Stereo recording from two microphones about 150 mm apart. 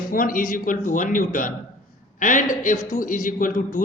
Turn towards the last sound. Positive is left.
turn(degrees=60)  # may be behind; listen again after turning